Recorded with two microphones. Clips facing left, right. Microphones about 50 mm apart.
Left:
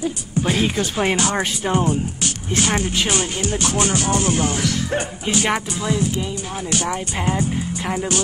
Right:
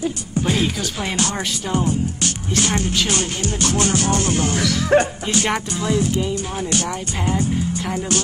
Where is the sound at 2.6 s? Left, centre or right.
Centre.